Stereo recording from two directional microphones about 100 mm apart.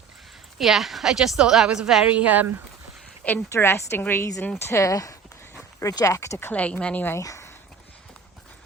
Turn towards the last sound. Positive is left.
turn(degrees=30)  # may be behind; listen again after turning